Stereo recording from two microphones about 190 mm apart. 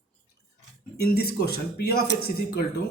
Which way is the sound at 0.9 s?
55° left (ahead or behind).